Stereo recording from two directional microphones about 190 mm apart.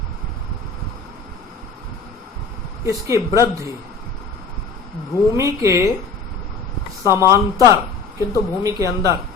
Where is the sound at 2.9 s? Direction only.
15° right (ahead or behind).